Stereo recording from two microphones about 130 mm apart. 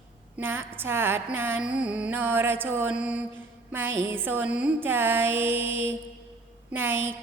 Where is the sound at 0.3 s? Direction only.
15° right (ahead or behind).